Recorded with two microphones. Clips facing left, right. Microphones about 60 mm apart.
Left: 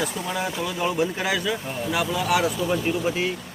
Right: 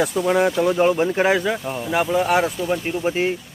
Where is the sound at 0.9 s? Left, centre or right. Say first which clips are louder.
Right 6 dB; right.